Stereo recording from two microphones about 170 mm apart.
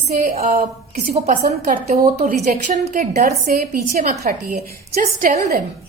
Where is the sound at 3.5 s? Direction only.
60° right (ahead or behind).